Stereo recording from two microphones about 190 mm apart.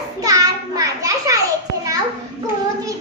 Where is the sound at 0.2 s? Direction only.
15° right (ahead or behind).